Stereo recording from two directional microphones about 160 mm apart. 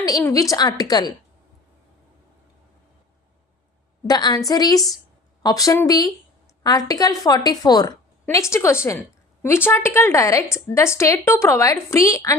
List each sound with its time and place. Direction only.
0.1 s a woman's voice: 20° left (ahead or behind)
4.0 s a woman's voice: 25° left (ahead or behind)